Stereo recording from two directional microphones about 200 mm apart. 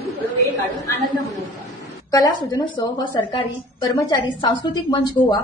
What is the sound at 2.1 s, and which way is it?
A woman's voice, 15° left (ahead or behind).